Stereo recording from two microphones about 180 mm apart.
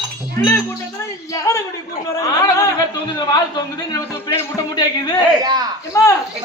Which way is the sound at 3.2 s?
25° left (ahead or behind).